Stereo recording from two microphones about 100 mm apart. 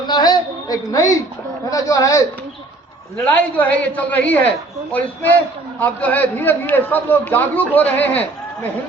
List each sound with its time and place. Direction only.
0.1 s a sound: 45° left (ahead or behind)
1.7 s a man's voice: 35° left (ahead or behind)
3.2 s a man's voice: 15° left (ahead or behind)